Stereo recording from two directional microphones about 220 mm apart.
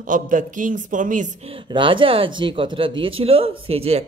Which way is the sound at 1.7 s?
20° right (ahead or behind).